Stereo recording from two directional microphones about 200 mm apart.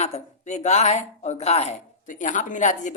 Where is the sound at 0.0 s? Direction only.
35° left (ahead or behind).